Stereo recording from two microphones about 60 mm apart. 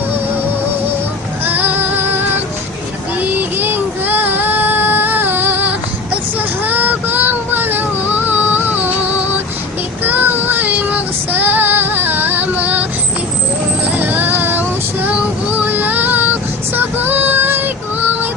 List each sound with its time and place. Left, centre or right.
1.5 s female singing: right
3.2 s child singing: right
6.7 s a sound: right
10.1 s child singing: right
14.0 s a sound: right
15.0 s child singing: right